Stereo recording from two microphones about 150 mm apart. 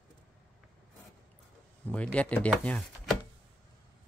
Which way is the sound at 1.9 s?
10° left (ahead or behind).